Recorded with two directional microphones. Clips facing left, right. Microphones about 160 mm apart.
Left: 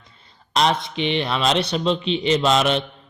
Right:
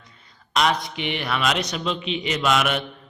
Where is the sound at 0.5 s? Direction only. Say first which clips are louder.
Left 2 dB; 30° left (ahead or behind).